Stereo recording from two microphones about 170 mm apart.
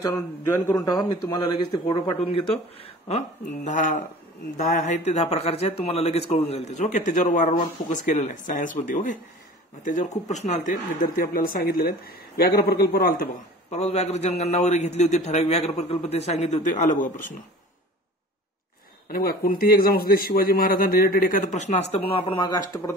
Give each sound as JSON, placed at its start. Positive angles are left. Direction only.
{"t": 0.0, "sound": "a man's voice", "side_deg": 20}
{"t": 13.7, "sound": "a man's voice", "side_deg": 40}
{"t": 19.0, "sound": "a man's voice", "side_deg": 60}